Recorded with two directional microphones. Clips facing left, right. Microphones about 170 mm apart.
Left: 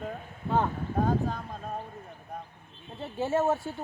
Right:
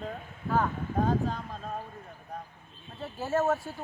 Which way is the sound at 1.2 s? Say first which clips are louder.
Even; 10° left (ahead or behind).